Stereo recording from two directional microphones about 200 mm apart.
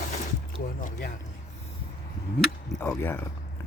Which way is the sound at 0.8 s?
55° left (ahead or behind).